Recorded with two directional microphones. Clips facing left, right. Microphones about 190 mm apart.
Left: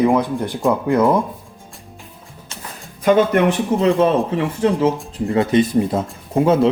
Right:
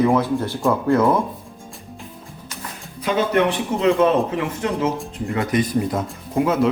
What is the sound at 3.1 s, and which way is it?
Speech, 50° left (ahead or behind).